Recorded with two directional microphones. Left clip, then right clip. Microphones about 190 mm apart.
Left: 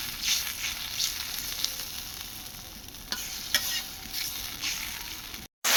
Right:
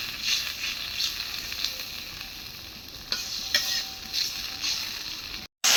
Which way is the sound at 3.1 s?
20° left (ahead or behind).